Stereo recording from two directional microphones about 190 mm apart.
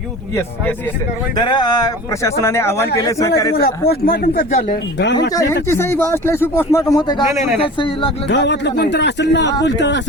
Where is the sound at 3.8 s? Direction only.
55° left (ahead or behind).